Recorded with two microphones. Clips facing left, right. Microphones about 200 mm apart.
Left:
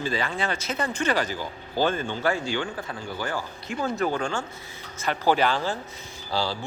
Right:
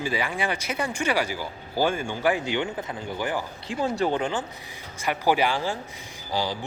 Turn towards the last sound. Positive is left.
turn(degrees=-15)  # may be behind; listen again after turning